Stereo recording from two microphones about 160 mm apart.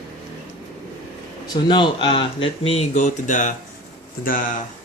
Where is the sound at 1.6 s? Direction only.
30° left (ahead or behind).